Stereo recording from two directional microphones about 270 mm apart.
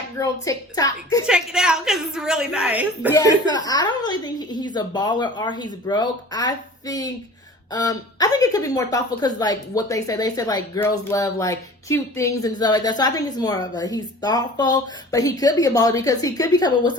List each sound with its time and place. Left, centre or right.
0.2 s a woman's voice: centre
1.3 s a woman's voice: centre
3.1 s a woman's voice: centre